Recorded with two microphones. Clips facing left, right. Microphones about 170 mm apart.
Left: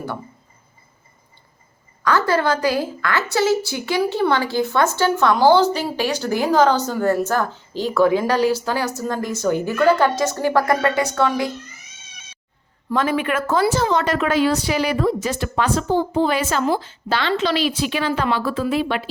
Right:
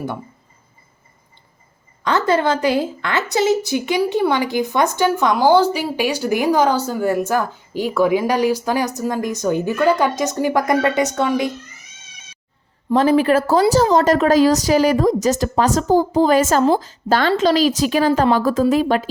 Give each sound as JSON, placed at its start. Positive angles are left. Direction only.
{"t": 2.0, "sound": "a woman's voice", "side_deg": -20}
{"t": 12.9, "sound": "a woman's voice", "side_deg": -35}